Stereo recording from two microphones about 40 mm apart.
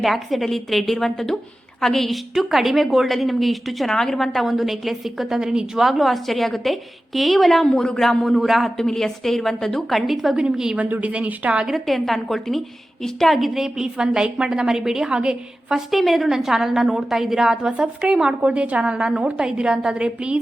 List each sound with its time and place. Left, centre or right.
0.0 s a woman's voice: centre
4.4 s a woman's voice: centre
5.4 s a woman's voice: centre
5.8 s a woman's voice: centre
8.2 s a woman's voice: centre
8.8 s a woman's voice: centre
10.3 s a woman's voice: centre
10.8 s a woman's voice: right
11.7 s a woman's voice: centre
13.5 s a woman's voice: centre
15.9 s a woman's voice: centre
17.6 s a woman's voice: right
18.4 s a woman's voice: right